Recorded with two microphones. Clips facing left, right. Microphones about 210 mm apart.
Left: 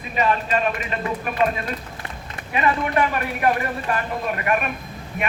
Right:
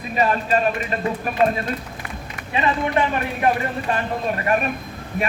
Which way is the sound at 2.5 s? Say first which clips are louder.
Even; 25° right (ahead or behind).